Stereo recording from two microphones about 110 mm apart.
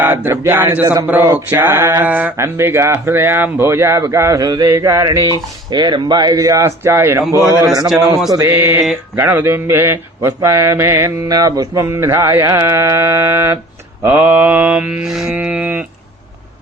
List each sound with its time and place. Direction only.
0.0 s mantra: 20° right (ahead or behind)
1.0 s speech: 15° right (ahead or behind)
7.9 s a man's voice: 5° right (ahead or behind)
8.3 s speech: 25° right (ahead or behind)
14.0 s mantra: 15° right (ahead or behind)
15.3 s mantra: 15° right (ahead or behind)